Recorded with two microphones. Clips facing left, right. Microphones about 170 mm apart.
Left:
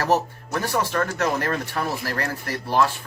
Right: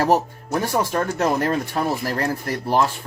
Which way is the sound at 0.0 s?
20° right (ahead or behind).